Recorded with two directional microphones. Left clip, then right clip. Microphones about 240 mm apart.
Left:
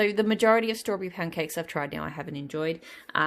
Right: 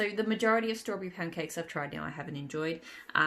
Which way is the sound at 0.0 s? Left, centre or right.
Left.